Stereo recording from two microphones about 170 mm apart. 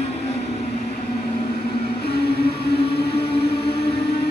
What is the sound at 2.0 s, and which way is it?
Music, 70° left (ahead or behind).